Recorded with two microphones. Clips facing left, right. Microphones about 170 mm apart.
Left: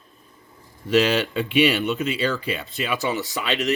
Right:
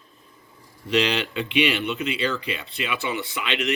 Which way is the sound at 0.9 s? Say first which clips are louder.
Left 4 dB; 45° left (ahead or behind).